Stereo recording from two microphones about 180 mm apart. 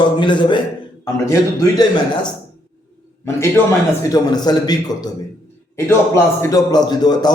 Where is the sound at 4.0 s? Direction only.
20° left (ahead or behind).